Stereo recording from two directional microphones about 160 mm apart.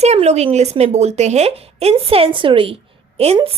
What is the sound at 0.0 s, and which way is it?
A woman's voice, 40° right (ahead or behind).